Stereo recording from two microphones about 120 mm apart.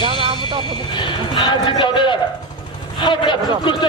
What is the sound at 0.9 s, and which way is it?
Livestock, 40° left (ahead or behind).